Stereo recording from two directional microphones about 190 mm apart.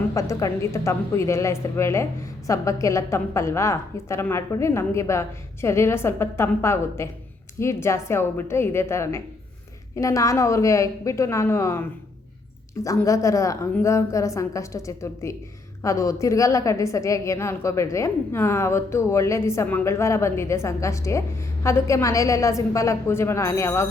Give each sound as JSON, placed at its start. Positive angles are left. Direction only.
{"t": 0.1, "sound": "a woman's voice", "side_deg": 15}